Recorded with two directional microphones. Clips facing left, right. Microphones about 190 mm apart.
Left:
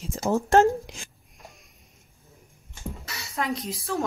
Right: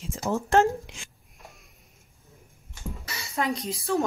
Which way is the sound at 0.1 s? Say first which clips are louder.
Left 3 dB; 40° left (ahead or behind).